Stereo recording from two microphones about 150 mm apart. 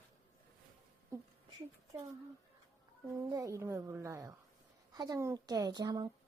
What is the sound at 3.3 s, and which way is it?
A woman's voice, 20° right (ahead or behind).